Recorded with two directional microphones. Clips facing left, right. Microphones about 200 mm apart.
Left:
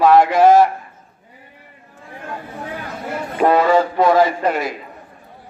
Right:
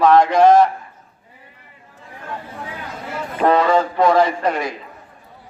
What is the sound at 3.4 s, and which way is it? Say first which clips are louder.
A man's voice: left 1 dB; 5° left (ahead or behind).